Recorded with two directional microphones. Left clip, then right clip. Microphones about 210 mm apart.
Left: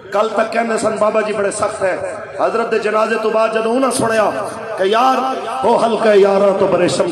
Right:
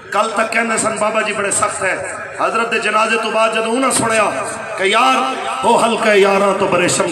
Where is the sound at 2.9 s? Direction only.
25° right (ahead or behind).